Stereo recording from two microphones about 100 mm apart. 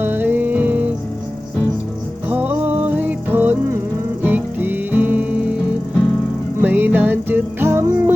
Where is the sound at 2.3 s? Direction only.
15° right (ahead or behind).